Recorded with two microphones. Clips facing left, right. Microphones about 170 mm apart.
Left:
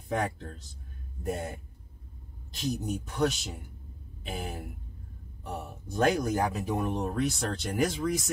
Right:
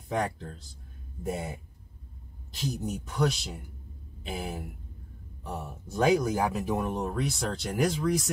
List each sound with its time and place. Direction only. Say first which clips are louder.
0.1 s speech: right 1 dB; centre (ahead or behind)
2.6 s speech: left 1 dB; centre (ahead or behind)